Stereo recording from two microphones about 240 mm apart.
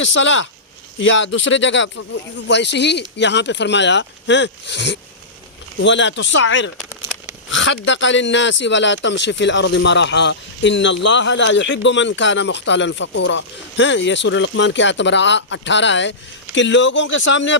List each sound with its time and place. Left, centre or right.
0.0 s speech: left